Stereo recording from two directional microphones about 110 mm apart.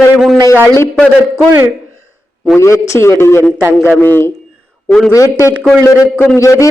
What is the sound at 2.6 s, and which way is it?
A man's voice, 25° left (ahead or behind).